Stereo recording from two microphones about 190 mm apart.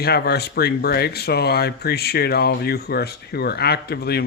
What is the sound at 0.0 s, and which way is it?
Speech, 55° left (ahead or behind).